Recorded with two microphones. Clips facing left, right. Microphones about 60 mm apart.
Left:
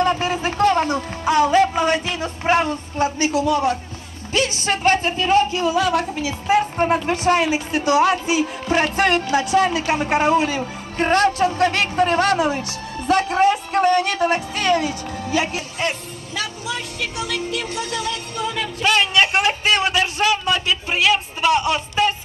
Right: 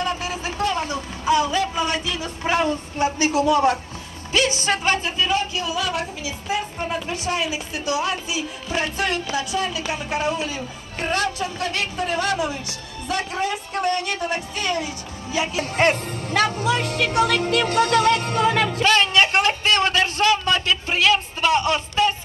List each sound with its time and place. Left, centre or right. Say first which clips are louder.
0.0 s music: left 6 dB; left
4.8 s speech: left 8 dB; left
13.8 s speech: left 6 dB; left
15.5 s speech: right 5 dB; right
18.9 s a man's voice: left 2 dB; centre